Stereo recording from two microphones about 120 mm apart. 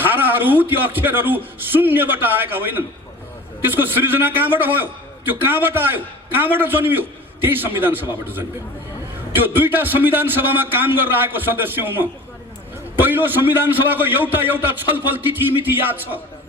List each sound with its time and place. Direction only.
0.0 s a man's voice: 15° right (ahead or behind)